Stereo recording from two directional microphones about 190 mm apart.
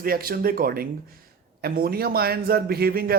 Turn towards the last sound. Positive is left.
turn(degrees=-55)  # may be behind; listen again after turning